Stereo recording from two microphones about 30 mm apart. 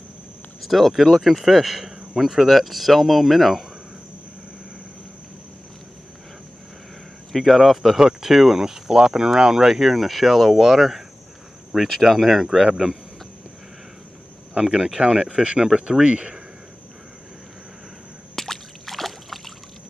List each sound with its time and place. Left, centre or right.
0.6 s speech: centre
1.4 s speech: centre
7.3 s speech: centre
14.5 s speech: right
18.3 s a sound: centre